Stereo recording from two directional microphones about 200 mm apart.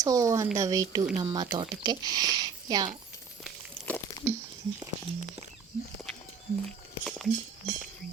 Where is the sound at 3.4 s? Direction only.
5° left (ahead or behind).